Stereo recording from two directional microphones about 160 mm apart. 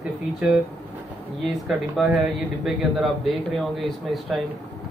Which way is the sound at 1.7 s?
Centre (ahead or behind).